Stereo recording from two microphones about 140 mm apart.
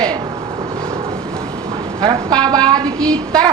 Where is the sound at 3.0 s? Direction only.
5° left (ahead or behind).